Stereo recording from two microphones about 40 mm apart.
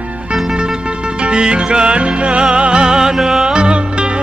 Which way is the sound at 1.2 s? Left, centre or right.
Right.